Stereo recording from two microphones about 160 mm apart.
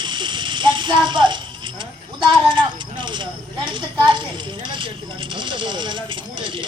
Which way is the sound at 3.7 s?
30° right (ahead or behind).